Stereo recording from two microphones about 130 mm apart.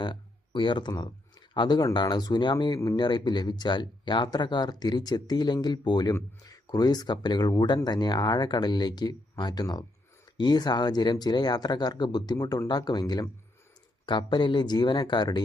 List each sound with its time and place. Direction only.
0.0 s speech: 35° left (ahead or behind)